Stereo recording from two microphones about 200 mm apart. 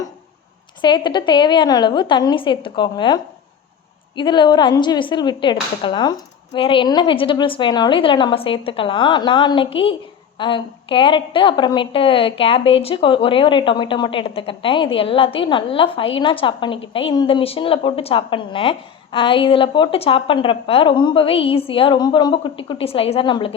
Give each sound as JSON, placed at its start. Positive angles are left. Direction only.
{"t": 0.8, "sound": "a woman's voice", "side_deg": 20}
{"t": 4.2, "sound": "a woman's voice", "side_deg": 25}